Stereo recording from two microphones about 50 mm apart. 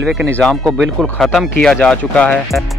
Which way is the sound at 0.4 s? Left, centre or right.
Centre.